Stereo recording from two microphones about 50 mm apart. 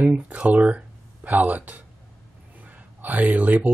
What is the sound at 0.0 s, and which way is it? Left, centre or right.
Speech, right.